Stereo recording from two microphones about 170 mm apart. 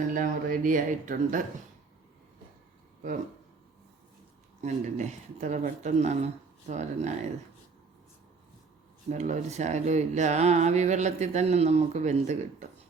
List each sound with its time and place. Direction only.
0.1 s speech: 50° right (ahead or behind)
4.6 s speech: 45° right (ahead or behind)
9.0 s speech: 45° right (ahead or behind)